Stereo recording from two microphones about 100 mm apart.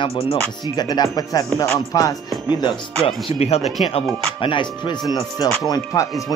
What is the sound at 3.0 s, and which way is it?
Speech, 80° left.